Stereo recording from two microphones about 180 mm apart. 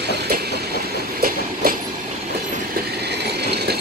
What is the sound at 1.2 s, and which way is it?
Train, 55° right (ahead or behind).